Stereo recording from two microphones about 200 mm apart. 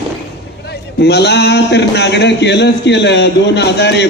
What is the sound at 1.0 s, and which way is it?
A man's voice, 55° left (ahead or behind).